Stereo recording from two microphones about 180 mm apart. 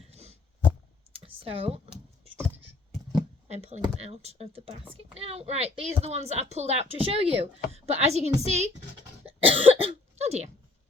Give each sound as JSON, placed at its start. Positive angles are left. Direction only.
{"t": 0.0, "sound": "a sound", "side_deg": -35}
{"t": 3.5, "sound": "a woman's voice", "side_deg": -35}
{"t": 9.2, "sound": "cough", "side_deg": -30}